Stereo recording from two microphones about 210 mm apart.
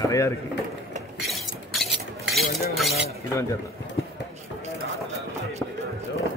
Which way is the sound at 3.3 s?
15° left (ahead or behind).